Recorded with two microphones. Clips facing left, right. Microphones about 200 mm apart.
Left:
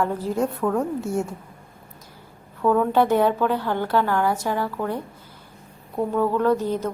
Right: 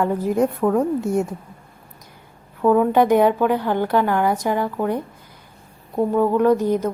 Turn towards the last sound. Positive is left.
turn(degrees=-15)  # may be behind; listen again after turning